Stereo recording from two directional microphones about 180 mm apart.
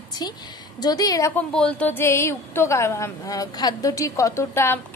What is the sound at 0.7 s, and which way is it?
Speech, 20° left (ahead or behind).